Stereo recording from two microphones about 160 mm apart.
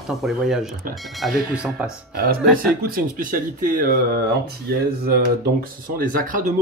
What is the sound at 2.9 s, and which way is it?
Speech, 60° right (ahead or behind).